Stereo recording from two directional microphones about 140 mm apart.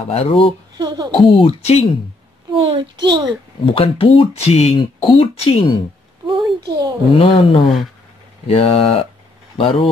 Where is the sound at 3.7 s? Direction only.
40° left (ahead or behind).